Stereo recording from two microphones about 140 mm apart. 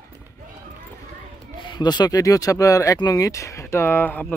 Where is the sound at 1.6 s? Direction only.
35° left (ahead or behind); by 4.3 s 15° left (ahead or behind).